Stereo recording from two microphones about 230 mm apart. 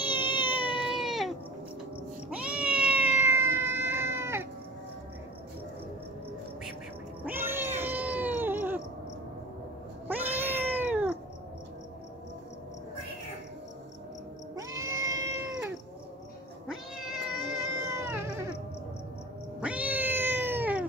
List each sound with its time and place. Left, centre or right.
0.1 s a sound: left
0.7 s baby cry: centre
2.2 s cat: centre
7.2 s cat: centre
10.0 s cat: centre
14.5 s cat: centre
16.6 s cat: centre
19.6 s cat: centre